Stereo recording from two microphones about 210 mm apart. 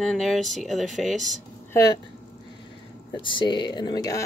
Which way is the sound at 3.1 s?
20° left (ahead or behind).